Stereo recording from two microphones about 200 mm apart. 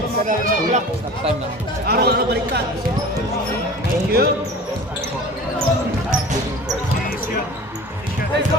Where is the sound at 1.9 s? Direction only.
50° right (ahead or behind).